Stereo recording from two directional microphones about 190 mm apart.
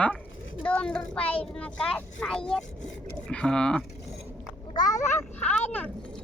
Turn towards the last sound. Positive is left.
turn(degrees=10)  # may be behind; listen again after turning